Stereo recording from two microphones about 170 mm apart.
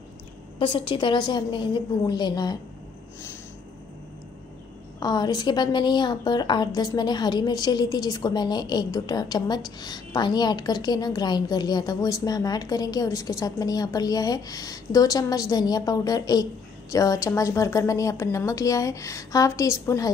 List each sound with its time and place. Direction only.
0.6 s a woman's voice: 30° left (ahead or behind)
5.0 s a woman's voice: 25° left (ahead or behind)